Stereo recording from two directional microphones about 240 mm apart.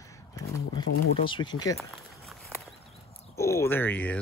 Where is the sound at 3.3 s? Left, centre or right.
Centre.